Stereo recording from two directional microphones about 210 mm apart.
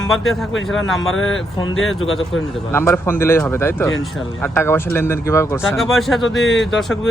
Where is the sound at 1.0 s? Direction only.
65° left (ahead or behind).